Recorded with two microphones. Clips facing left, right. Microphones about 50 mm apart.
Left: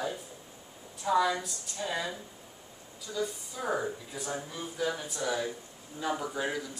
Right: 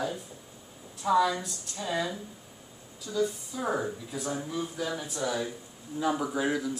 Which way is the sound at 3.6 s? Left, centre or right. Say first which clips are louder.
Right 1 dB; centre.